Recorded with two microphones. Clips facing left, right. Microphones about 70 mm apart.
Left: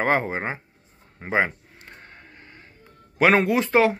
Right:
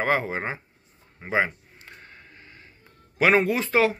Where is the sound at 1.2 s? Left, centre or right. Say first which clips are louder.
Left 2 dB; left.